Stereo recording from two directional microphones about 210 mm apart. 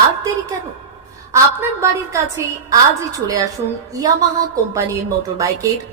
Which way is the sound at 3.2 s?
15° right (ahead or behind).